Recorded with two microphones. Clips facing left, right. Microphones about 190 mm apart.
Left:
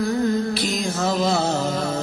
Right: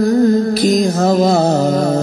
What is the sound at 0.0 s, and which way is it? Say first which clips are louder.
Music: right 9 dB; 40° right (ahead or behind).